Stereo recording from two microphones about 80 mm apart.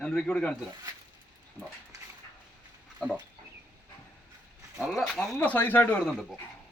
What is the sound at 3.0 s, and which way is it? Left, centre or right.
Chicken, centre.